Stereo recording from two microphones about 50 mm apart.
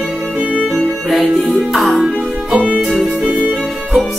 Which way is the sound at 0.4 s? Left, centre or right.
Right.